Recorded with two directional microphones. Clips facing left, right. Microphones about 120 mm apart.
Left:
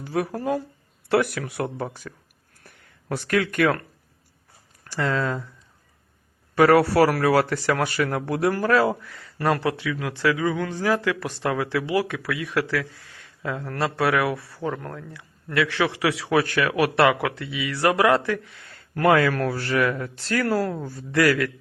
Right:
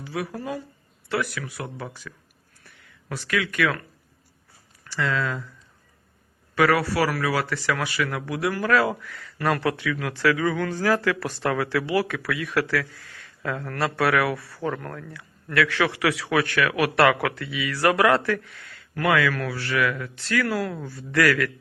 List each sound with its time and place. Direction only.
0.0 s speech: 45° left (ahead or behind)
4.9 s a man's voice: 40° left (ahead or behind)
6.6 s speech: 45° left (ahead or behind); by 18.7 s 25° left (ahead or behind)
18.7 s a man's voice: 40° left (ahead or behind)
21.1 s speech: 25° left (ahead or behind)